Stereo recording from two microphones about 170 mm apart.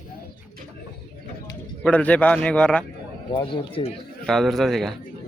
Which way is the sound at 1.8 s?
10° left (ahead or behind).